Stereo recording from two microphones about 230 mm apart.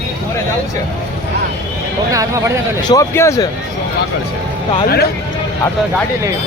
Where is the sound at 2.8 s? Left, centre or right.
Centre.